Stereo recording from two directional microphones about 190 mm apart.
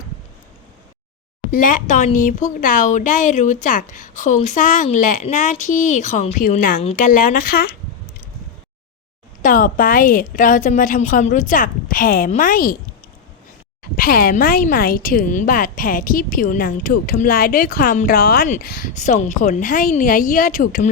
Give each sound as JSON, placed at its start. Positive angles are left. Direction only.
{"t": 1.5, "sound": "a woman's voice", "side_deg": 45}
{"t": 9.4, "sound": "a woman's voice", "side_deg": 45}
{"t": 13.9, "sound": "a woman's voice", "side_deg": 50}